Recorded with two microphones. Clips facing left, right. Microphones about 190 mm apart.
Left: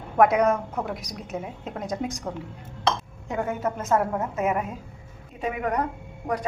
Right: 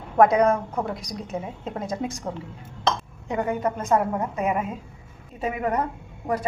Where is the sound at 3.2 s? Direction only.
Centre (ahead or behind).